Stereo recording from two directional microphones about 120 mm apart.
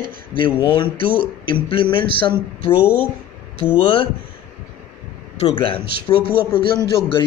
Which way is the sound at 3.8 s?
45° left (ahead or behind).